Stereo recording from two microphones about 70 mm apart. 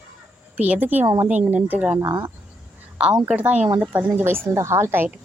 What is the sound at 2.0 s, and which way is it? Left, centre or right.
Speech, right.